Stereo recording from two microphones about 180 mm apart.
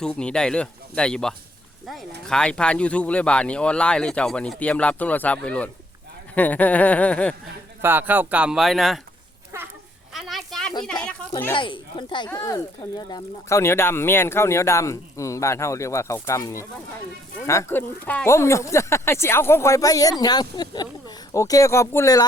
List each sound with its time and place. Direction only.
0.0 s speech: 5° left (ahead or behind)
7.8 s speech: 10° right (ahead or behind)
10.1 s a sound: centre (ahead or behind)
11.3 s speech: 10° left (ahead or behind)
11.5 s speech: 25° left (ahead or behind)